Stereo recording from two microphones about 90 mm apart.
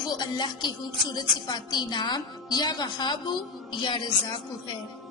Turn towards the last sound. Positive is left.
turn(degrees=55)  # may be behind; listen again after turning